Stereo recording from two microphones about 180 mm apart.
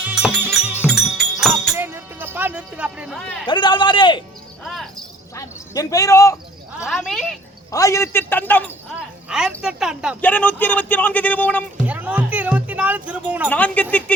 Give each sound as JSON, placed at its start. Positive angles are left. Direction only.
{"t": 0.0, "sound": "music", "side_deg": -5}
{"t": 1.7, "sound": "music", "side_deg": -15}
{"t": 3.4, "sound": "a man's voice", "side_deg": 25}
{"t": 4.6, "sound": "music", "side_deg": 0}
{"t": 5.3, "sound": "a sound", "side_deg": 15}
{"t": 6.7, "sound": "a woman's voice", "side_deg": 0}
{"t": 7.7, "sound": "a man's voice", "side_deg": 15}
{"t": 9.0, "sound": "speech", "side_deg": -5}
{"t": 10.2, "sound": "a man's voice", "side_deg": 10}
{"t": 11.9, "sound": "music", "side_deg": -10}
{"t": 13.5, "sound": "a man's voice", "side_deg": 10}